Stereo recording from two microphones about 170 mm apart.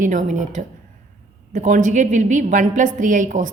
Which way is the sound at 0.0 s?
50° right (ahead or behind).